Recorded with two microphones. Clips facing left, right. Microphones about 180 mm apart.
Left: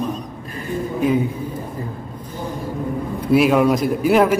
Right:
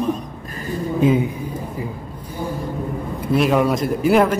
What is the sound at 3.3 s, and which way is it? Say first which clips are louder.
A man's voice: left 2 dB; centre (ahead or behind).